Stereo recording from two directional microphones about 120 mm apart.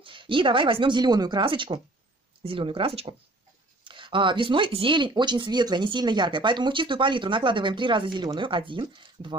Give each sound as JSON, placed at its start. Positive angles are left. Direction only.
{"t": 0.0, "sound": "speech", "side_deg": -45}